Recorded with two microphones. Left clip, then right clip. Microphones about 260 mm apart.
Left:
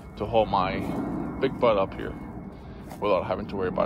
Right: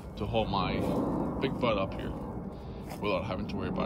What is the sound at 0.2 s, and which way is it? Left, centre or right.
Speech, centre.